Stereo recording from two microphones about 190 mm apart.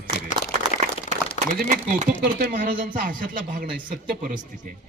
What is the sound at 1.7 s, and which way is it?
A man's voice, 45° right (ahead or behind).